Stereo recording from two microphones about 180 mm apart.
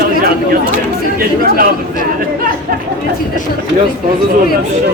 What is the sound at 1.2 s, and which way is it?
Speech, 55° right (ahead or behind).